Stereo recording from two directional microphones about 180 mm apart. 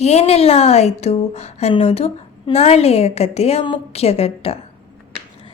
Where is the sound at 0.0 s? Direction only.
35° left (ahead or behind).